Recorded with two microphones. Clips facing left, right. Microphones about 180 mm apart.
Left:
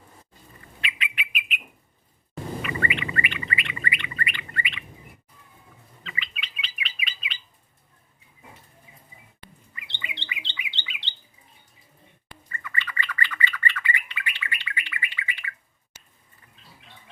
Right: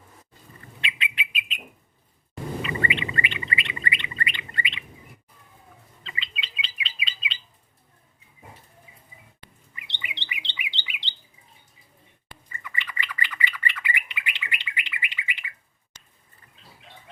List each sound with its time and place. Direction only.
0.8 s bird: 25° right (ahead or behind)
2.6 s bird: 25° right (ahead or behind)
6.0 s bird: 30° right (ahead or behind)
9.9 s bird: 15° right (ahead or behind)
12.5 s bird: 15° right (ahead or behind)